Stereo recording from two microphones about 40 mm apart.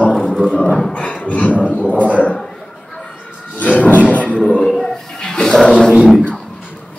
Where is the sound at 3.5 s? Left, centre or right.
Left.